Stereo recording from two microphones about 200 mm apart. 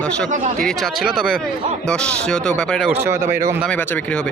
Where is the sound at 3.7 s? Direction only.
5° left (ahead or behind).